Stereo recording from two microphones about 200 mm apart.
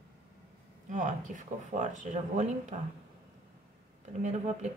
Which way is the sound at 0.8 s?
40° right (ahead or behind).